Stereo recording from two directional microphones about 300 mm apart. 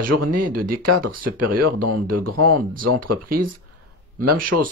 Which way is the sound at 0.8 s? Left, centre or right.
Right.